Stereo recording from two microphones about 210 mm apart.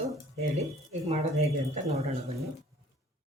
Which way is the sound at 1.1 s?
30° right (ahead or behind).